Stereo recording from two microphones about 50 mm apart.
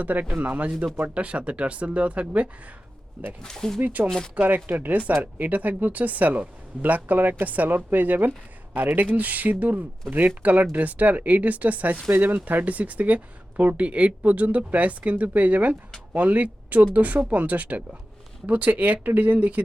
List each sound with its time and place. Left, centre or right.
0.0 s speech: right
3.4 s speech: centre
3.8 s speech: right